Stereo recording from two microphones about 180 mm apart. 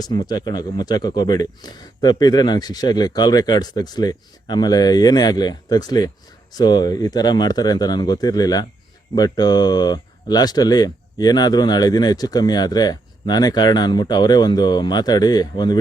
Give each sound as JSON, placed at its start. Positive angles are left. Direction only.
{"t": 0.0, "sound": "speech", "side_deg": 20}